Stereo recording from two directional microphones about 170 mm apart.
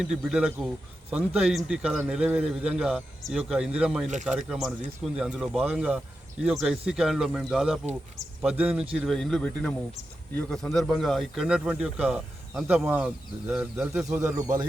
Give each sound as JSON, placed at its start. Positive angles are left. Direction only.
{"t": 0.0, "sound": "a man's voice", "side_deg": -5}
{"t": 4.0, "sound": "speech", "side_deg": -45}
{"t": 4.3, "sound": "a man's voice", "side_deg": -5}
{"t": 14.3, "sound": "speech", "side_deg": -20}